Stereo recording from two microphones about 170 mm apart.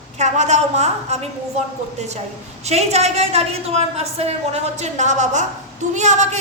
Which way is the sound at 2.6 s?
40° right (ahead or behind).